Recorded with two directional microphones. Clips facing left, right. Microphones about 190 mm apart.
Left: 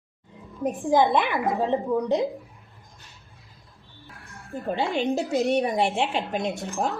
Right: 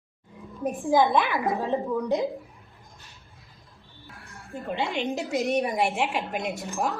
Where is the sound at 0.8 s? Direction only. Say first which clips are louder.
Left 1 dB; 15° left (ahead or behind).